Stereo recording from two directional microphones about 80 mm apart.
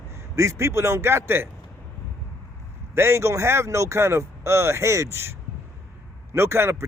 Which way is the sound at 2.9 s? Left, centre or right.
Right.